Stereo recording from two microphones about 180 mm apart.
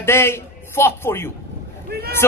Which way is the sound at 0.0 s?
15° left (ahead or behind).